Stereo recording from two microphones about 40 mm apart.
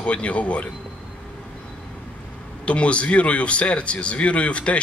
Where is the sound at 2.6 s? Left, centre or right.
Left.